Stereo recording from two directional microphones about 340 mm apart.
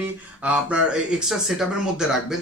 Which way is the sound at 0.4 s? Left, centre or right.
Centre.